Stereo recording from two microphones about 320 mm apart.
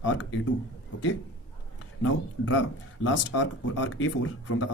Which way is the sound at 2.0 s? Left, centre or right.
Left.